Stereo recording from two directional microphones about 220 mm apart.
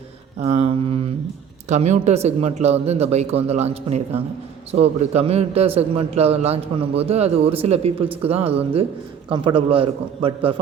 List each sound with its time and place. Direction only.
0.3 s a man's voice: 30° right (ahead or behind)